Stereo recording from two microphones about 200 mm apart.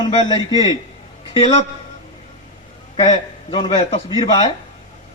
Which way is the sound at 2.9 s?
25° left (ahead or behind).